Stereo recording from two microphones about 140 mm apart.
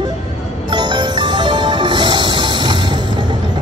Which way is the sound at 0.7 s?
30° right (ahead or behind).